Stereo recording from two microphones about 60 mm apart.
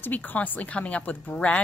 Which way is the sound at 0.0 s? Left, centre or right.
Left.